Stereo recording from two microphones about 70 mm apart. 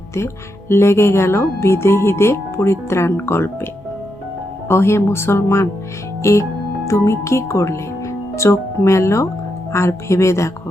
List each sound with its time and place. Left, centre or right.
0.7 s speech: left
4.7 s speech: left